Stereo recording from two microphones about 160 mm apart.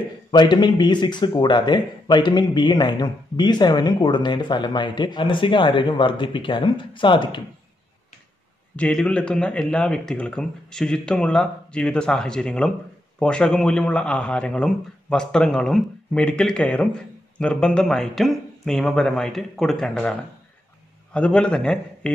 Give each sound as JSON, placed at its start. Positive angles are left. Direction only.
{"t": 0.3, "sound": "speech", "side_deg": 30}
{"t": 8.7, "sound": "a man's voice", "side_deg": 5}